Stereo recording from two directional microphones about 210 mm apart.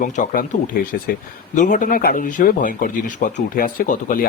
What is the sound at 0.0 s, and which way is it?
Speech, 40° left (ahead or behind).